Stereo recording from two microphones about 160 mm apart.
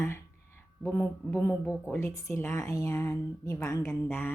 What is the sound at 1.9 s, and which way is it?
A woman's voice, 15° left (ahead or behind).